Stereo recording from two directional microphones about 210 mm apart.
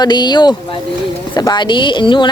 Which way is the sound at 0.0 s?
20° left (ahead or behind).